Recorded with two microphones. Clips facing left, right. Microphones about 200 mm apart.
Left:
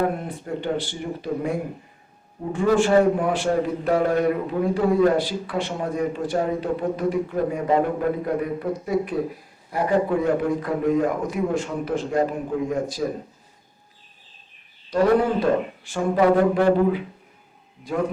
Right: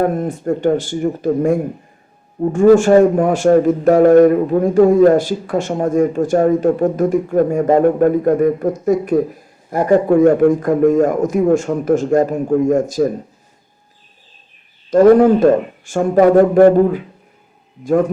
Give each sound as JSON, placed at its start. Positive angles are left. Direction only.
{"t": 0.2, "sound": "a man's voice", "side_deg": -45}
{"t": 14.8, "sound": "a man's voice", "side_deg": -45}